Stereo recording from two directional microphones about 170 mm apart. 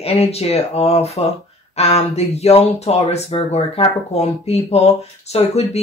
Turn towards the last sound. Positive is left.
turn(degrees=40)  # may be behind; listen again after turning